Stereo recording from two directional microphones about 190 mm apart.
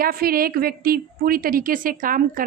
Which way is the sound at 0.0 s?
50° right (ahead or behind).